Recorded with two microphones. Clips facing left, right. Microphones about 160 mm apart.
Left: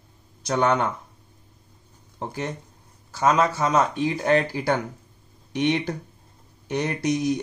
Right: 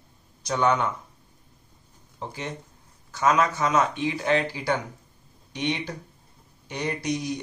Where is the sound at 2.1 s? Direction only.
45° left (ahead or behind).